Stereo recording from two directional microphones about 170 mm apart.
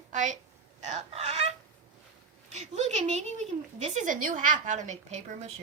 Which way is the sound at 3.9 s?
50° right (ahead or behind).